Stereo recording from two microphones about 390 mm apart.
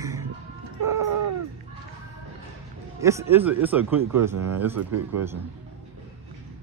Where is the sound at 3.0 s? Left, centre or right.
Centre.